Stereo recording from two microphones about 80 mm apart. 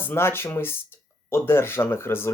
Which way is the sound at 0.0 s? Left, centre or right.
Left.